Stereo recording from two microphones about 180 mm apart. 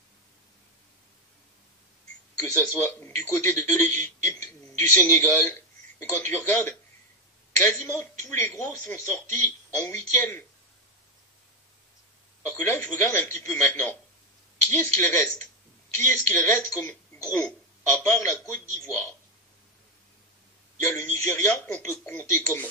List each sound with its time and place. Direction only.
2.4 s a man's voice: 15° left (ahead or behind)
12.4 s speech: 15° left (ahead or behind)
20.8 s speech: 15° left (ahead or behind)